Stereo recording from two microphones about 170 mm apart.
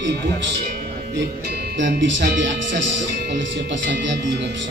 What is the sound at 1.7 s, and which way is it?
Speech, 90° right.